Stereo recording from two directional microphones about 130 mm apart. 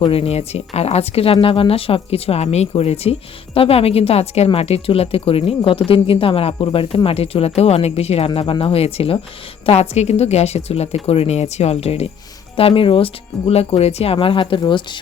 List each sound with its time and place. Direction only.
0.0 s speech: 50° left (ahead or behind)